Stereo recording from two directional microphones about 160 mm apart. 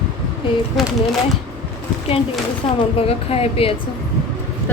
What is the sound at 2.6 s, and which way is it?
Speech, 30° left (ahead or behind).